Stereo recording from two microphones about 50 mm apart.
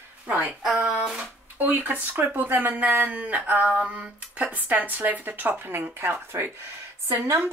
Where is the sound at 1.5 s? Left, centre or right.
Right.